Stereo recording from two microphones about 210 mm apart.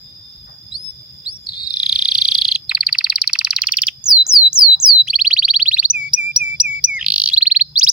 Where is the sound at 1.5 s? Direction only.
45° left (ahead or behind).